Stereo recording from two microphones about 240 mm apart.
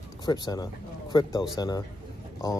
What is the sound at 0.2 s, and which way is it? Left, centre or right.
Speech, centre.